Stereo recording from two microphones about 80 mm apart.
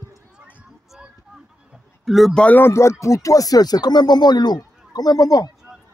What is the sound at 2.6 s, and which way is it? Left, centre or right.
Speech, left.